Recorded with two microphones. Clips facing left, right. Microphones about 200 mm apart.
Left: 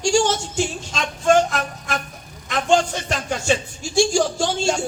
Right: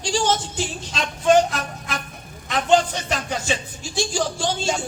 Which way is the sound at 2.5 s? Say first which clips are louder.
Even; 45° left (ahead or behind).